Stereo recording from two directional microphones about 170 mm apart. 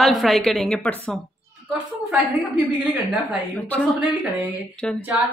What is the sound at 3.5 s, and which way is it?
Speech, 10° left (ahead or behind).